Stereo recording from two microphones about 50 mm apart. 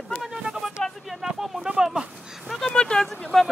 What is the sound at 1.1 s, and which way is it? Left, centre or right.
Speech, centre.